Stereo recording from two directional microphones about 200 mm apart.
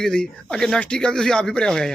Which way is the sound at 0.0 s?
5° left (ahead or behind).